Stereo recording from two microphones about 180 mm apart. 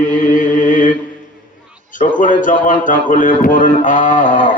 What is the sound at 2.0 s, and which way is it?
Speech, 45° left (ahead or behind).